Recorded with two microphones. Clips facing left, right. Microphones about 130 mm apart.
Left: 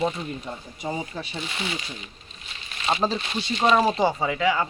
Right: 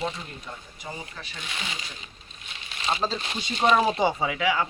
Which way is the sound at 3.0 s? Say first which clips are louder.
Left 4 dB; 15° left (ahead or behind).